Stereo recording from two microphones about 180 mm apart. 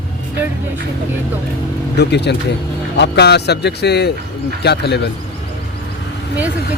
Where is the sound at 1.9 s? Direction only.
70° left (ahead or behind).